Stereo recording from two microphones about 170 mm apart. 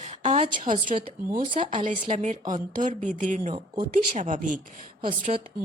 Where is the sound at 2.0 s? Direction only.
45° right (ahead or behind).